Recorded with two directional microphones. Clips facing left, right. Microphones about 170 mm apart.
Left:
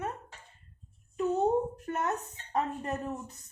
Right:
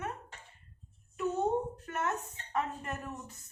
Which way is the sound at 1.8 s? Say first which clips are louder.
Left 3 dB; 30° left (ahead or behind).